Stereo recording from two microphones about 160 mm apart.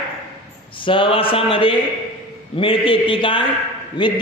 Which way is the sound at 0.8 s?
30° left (ahead or behind).